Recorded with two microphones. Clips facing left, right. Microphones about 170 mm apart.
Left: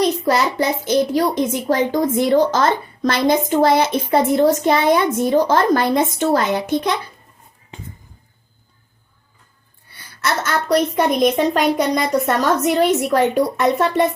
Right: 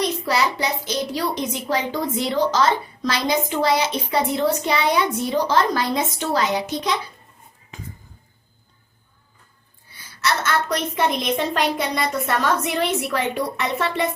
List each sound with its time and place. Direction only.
0.3 s speech: 50° left (ahead or behind)
7.7 s a sound: 30° left (ahead or behind)
10.2 s a woman's voice: 50° left (ahead or behind)
10.7 s speech: 40° left (ahead or behind)